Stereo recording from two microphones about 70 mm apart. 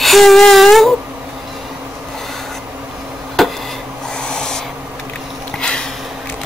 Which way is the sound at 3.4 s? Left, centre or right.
Centre.